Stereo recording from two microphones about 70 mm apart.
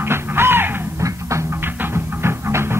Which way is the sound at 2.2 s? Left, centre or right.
Right.